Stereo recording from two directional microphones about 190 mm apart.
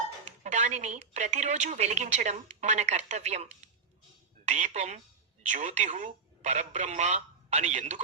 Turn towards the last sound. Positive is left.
turn(degrees=-35)  # may be behind; listen again after turning